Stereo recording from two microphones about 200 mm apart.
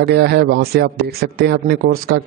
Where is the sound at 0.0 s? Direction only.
55° right (ahead or behind).